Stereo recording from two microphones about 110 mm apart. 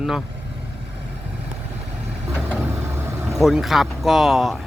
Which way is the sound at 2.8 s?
25° right (ahead or behind).